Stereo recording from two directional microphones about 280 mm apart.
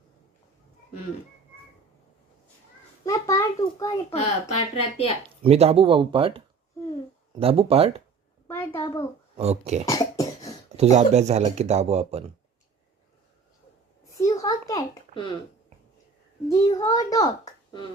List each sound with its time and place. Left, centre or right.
3.0 s a child's voice: centre
5.4 s speech: right
8.4 s a child's voice: centre
9.4 s speech: right
9.8 s cough: centre
10.8 s speech: right
14.0 s a sound: centre
16.5 s a child's voice: centre